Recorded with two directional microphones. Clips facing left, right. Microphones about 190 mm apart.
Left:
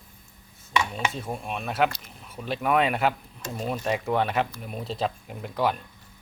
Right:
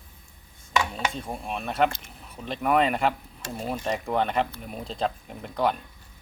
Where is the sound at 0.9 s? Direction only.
5° left (ahead or behind).